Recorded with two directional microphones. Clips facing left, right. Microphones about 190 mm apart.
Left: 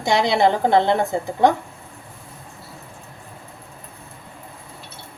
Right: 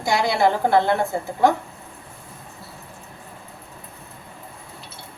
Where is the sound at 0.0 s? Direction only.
20° left (ahead or behind).